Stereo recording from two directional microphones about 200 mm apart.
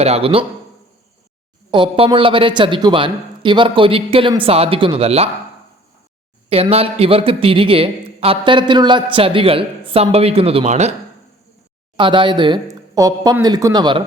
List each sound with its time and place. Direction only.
0.0 s a man's voice: 30° right (ahead or behind)
1.7 s a man's voice: 25° right (ahead or behind)
6.5 s a man's voice: 30° right (ahead or behind)
11.9 s a man's voice: 25° right (ahead or behind)